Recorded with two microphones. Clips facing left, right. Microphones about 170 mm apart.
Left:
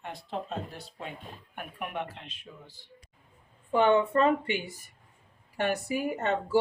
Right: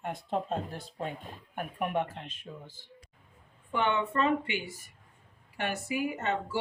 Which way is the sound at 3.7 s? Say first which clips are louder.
Left 6 dB; 40° left (ahead or behind).